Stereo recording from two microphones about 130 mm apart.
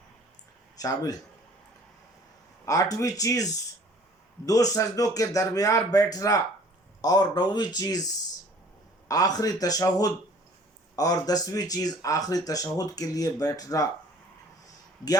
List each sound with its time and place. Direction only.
0.8 s speech: 30° left (ahead or behind)
2.6 s speech: 25° left (ahead or behind)